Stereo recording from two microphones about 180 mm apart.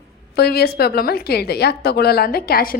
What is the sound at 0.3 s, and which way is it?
A woman's voice, 60° left (ahead or behind).